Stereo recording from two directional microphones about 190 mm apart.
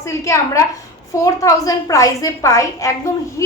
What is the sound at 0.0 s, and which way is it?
A woman's voice, 15° left (ahead or behind).